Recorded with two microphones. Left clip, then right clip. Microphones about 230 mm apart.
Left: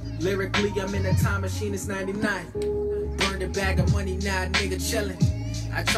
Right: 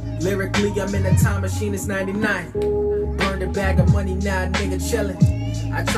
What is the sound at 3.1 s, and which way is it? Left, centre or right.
Music, centre.